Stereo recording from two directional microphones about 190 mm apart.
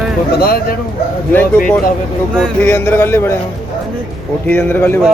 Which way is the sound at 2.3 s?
10° left (ahead or behind).